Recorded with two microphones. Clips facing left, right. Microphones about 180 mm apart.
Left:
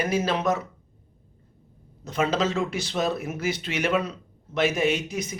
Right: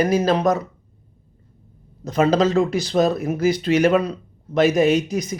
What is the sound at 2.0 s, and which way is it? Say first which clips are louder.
Speech: right 7 dB; 40° right (ahead or behind).